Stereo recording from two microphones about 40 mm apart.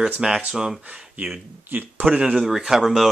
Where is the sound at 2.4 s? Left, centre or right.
Centre.